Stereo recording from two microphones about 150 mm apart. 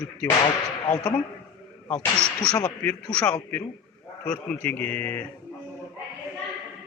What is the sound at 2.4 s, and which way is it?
Speech, 10° left (ahead or behind).